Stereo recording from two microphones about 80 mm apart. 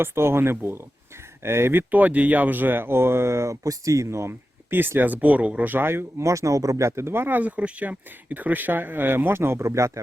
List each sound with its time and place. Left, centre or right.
0.0 s speech: right